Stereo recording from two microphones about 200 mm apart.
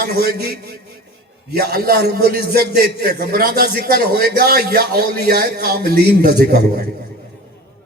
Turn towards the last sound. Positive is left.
turn(degrees=-50)  # may be behind; listen again after turning